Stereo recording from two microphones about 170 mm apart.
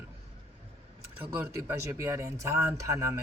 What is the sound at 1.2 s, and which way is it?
Speech, 10° right (ahead or behind).